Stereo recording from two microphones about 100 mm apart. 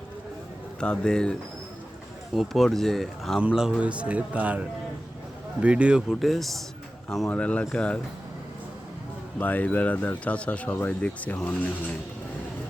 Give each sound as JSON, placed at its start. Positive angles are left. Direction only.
{"t": 0.8, "sound": "a man's voice", "side_deg": 10}
{"t": 5.6, "sound": "speech", "side_deg": -10}
{"t": 7.3, "sound": "speech", "side_deg": 10}
{"t": 9.4, "sound": "speech", "side_deg": 15}